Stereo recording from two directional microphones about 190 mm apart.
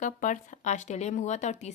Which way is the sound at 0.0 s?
40° left (ahead or behind).